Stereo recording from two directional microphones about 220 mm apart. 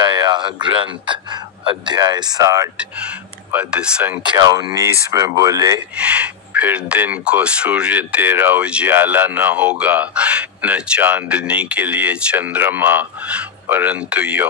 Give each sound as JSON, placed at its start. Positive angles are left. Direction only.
{"t": 0.0, "sound": "a man's voice", "side_deg": -15}
{"t": 4.2, "sound": "speech", "side_deg": -15}